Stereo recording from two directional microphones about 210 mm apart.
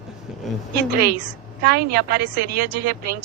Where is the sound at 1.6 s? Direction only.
50° right (ahead or behind).